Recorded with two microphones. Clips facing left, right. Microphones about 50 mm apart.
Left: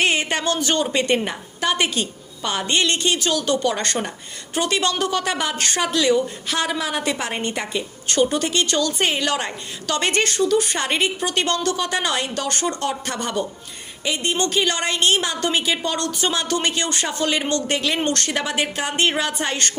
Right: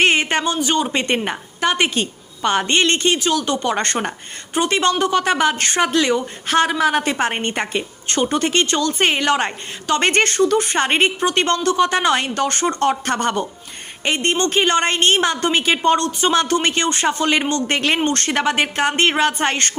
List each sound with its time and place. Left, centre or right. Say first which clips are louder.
0.0 s a sound: right 4 dB; right
0.4 s a man's voice: right 2 dB; centre
0.9 s a woman's voice: even; right